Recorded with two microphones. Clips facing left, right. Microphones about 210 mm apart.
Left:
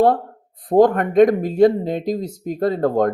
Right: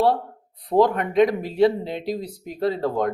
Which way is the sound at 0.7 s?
50° left (ahead or behind).